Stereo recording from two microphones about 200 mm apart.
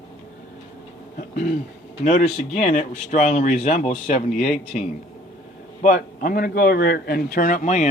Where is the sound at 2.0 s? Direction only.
35° left (ahead or behind).